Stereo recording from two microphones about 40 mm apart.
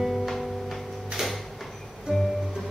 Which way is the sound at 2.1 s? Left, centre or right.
Centre.